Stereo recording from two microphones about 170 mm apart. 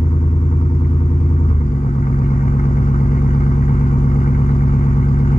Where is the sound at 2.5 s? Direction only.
45° left (ahead or behind).